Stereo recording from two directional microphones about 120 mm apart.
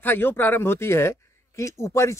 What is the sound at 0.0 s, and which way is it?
Speech, 15° left (ahead or behind).